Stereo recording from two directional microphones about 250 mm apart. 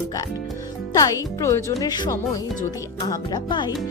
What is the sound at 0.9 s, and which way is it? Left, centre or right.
Speech, centre.